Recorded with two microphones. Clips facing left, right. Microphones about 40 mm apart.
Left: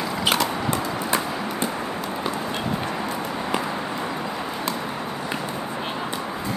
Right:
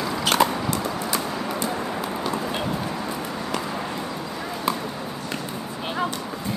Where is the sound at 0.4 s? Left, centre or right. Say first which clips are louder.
Right 4 dB; right.